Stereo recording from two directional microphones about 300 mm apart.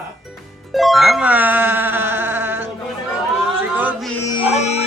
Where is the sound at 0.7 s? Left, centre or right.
Centre.